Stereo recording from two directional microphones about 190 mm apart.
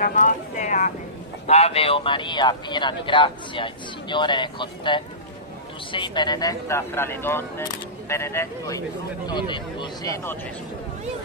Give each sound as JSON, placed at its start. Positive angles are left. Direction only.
{"t": 0.0, "sound": "speech", "side_deg": 40}